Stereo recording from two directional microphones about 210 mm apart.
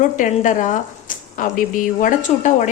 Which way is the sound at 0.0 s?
35° left (ahead or behind).